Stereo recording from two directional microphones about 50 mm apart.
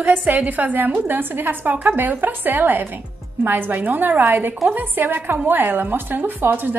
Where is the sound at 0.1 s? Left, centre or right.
Right.